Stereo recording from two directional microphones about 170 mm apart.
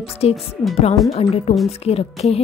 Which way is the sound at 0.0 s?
35° left (ahead or behind).